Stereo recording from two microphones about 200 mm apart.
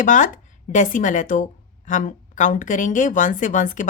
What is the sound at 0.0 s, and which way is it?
A woman's voice, 40° left (ahead or behind).